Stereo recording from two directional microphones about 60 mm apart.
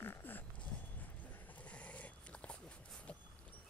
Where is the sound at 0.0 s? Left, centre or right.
Left; by 3.2 s centre.